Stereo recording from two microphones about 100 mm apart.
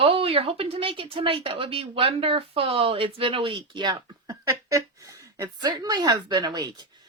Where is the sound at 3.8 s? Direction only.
45° right (ahead or behind).